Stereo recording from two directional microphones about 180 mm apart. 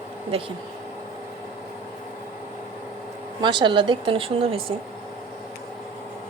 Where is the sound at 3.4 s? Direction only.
25° right (ahead or behind).